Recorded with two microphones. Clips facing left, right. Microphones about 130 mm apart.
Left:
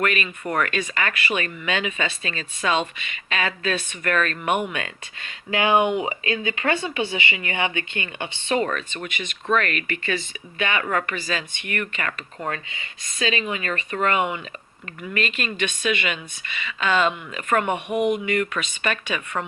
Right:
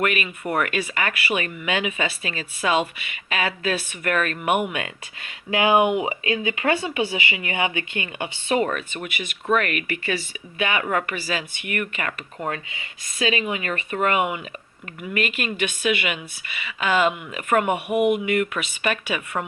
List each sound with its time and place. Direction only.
0.0 s speech: 15° right (ahead or behind)